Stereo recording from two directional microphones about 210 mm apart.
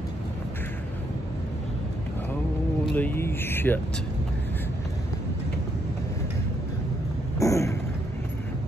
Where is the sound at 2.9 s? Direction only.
10° left (ahead or behind).